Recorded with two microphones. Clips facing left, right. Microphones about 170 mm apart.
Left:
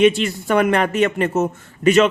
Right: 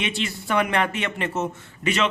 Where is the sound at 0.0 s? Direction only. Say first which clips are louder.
Left 13 dB; 45° left (ahead or behind).